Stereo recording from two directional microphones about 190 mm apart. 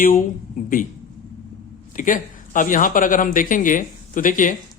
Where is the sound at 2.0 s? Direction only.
45° left (ahead or behind).